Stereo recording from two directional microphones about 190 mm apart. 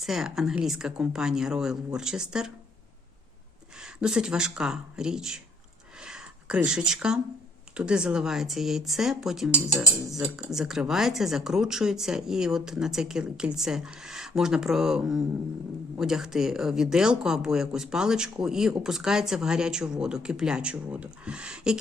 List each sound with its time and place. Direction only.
0.0 s speech: centre (ahead or behind)
3.8 s speech: 5° right (ahead or behind)
6.0 s a sound: 5° right (ahead or behind)
7.8 s speech: 5° right (ahead or behind)